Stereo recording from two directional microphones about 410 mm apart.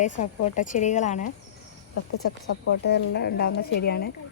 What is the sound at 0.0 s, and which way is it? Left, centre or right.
A woman's voice, centre.